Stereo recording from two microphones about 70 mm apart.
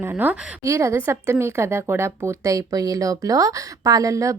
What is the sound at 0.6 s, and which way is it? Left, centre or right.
Speech, right.